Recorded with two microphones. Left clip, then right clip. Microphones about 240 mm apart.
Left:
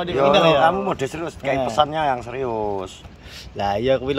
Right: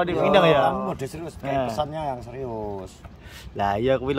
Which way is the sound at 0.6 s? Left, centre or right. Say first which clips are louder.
Left 6 dB; centre.